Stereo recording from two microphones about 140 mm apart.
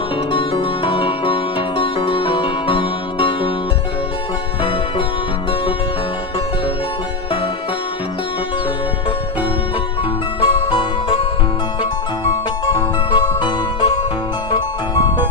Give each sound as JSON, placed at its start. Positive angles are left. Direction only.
{"t": 0.3, "sound": "music", "side_deg": 40}
{"t": 4.6, "sound": "music", "side_deg": 40}
{"t": 10.4, "sound": "music", "side_deg": 40}
{"t": 12.6, "sound": "music", "side_deg": 35}